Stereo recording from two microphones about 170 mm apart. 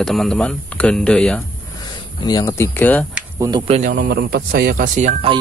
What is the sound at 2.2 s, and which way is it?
Speech, 20° left (ahead or behind).